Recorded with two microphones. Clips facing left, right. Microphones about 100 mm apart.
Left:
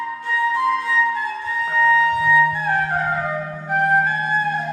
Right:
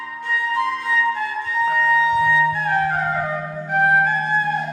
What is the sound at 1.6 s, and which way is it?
Music, centre (ahead or behind).